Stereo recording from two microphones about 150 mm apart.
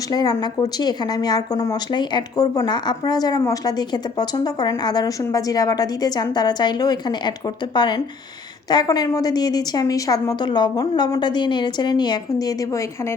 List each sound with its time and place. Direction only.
0.1 s speech: 25° left (ahead or behind)